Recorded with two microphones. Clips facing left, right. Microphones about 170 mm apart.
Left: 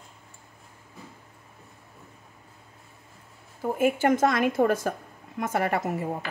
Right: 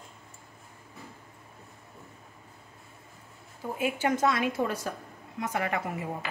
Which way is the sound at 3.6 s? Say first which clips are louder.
Left 6 dB; 50° left (ahead or behind).